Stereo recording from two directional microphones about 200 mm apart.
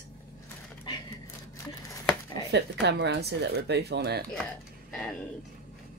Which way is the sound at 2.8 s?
60° right (ahead or behind).